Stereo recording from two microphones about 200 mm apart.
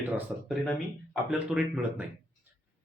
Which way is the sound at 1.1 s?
5° right (ahead or behind).